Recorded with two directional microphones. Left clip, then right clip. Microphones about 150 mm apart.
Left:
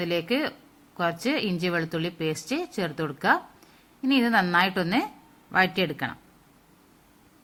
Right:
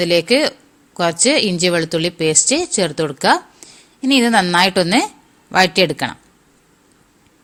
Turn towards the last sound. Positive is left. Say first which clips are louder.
# right 12 dB
turn(degrees=-45)  # may be behind; listen again after turning